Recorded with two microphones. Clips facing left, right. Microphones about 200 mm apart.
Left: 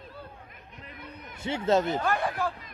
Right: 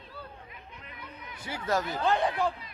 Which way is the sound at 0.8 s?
45° left (ahead or behind).